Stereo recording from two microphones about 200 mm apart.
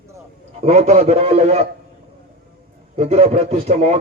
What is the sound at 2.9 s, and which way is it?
A man's voice, 30° right (ahead or behind).